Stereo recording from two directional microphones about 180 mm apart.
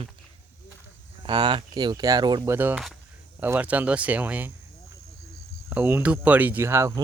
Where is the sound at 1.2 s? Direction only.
25° right (ahead or behind).